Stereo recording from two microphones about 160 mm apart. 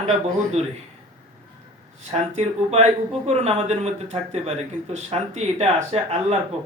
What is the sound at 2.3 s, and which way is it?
Speech, 40° right (ahead or behind).